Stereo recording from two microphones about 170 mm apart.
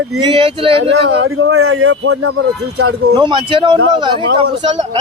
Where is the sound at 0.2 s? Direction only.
30° right (ahead or behind).